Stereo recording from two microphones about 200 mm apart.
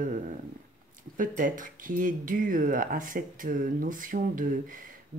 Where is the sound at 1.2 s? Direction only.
40° right (ahead or behind).